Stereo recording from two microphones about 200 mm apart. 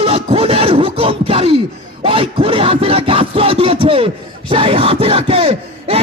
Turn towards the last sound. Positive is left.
turn(degrees=-30)  # may be behind; listen again after turning